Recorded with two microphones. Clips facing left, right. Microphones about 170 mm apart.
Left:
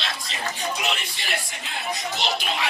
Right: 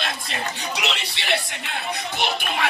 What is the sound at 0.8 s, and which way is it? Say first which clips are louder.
Speech: even; 75° right (ahead or behind).